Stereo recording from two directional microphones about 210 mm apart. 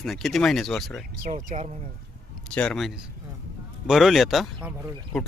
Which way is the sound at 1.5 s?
35° right (ahead or behind).